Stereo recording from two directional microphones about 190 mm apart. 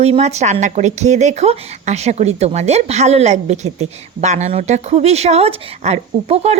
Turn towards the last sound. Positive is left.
turn(degrees=-35)  # may be behind; listen again after turning